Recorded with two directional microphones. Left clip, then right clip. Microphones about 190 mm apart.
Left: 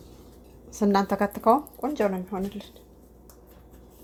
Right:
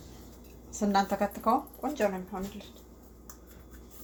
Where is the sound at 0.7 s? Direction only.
45° left (ahead or behind).